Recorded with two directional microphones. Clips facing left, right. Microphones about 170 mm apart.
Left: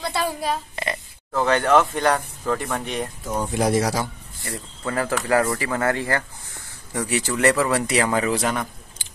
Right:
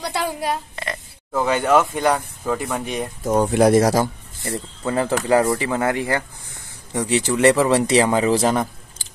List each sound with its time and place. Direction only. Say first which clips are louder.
0.1 s speech: right 2 dB; 10° right (ahead or behind)
0.8 s oink: left 1 dB; centre (ahead or behind)
1.3 s speech: right 1 dB; 10° right (ahead or behind)
3.3 s speech: right 8 dB; 55° right (ahead or behind)
4.4 s speech: right 6 dB; 20° right (ahead or behind)